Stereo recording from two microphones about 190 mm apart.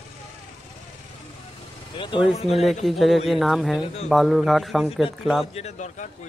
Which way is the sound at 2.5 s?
Centre (ahead or behind).